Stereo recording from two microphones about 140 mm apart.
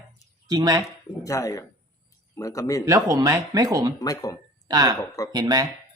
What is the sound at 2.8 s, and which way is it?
Speech, 20° right (ahead or behind).